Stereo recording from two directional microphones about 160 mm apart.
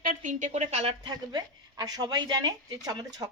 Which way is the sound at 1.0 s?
25° right (ahead or behind).